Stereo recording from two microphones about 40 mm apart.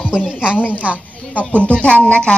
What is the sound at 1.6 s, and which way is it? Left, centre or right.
Speech, left.